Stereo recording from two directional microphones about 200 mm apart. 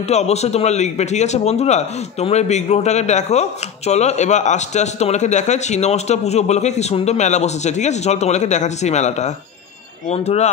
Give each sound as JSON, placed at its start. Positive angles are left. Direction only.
{"t": 0.1, "sound": "a man's voice", "side_deg": 35}